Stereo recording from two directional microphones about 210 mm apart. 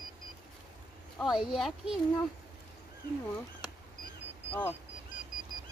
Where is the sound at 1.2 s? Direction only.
Centre (ahead or behind).